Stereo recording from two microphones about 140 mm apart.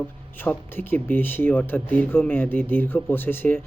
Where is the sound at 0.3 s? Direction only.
15° left (ahead or behind).